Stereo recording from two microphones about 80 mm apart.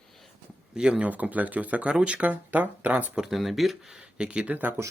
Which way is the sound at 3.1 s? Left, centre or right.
Centre.